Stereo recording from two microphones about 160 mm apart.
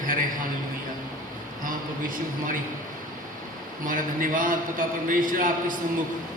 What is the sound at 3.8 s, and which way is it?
A man's voice, 60° right (ahead or behind).